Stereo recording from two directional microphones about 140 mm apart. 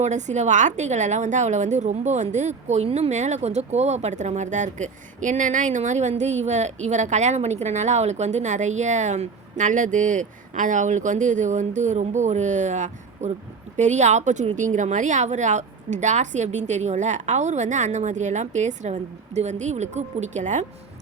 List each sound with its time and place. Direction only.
0.0 s a woman's voice: 60° right (ahead or behind)